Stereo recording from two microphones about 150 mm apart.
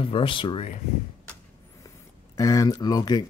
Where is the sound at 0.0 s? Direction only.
35° left (ahead or behind).